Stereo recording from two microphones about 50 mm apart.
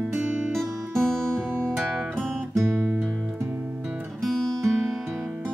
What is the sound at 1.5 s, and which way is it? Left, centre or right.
Music, right.